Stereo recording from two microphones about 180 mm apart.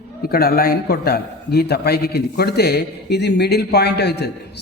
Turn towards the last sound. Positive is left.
turn(degrees=65)  # may be behind; listen again after turning